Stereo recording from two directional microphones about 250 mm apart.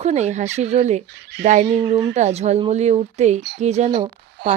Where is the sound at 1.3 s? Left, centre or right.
Right.